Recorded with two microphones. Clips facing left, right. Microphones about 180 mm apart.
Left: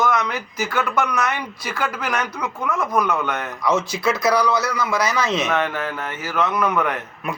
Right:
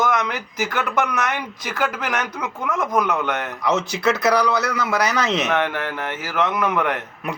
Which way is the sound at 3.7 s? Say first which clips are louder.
Even; 70° right (ahead or behind).